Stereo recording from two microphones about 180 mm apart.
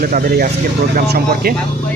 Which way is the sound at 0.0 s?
55° right (ahead or behind).